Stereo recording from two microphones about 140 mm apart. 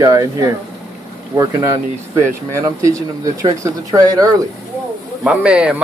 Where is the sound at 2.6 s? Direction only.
25° right (ahead or behind).